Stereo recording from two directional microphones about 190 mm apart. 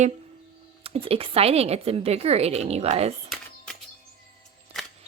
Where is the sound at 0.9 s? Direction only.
30° right (ahead or behind).